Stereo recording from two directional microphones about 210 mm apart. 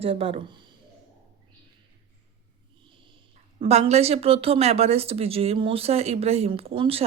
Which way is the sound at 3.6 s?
30° right (ahead or behind).